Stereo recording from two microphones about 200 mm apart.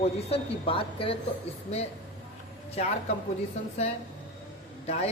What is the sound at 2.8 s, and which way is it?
Speech, 30° left (ahead or behind).